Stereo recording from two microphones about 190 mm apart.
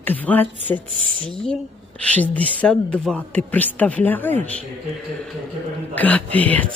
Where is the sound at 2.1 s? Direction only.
10° left (ahead or behind).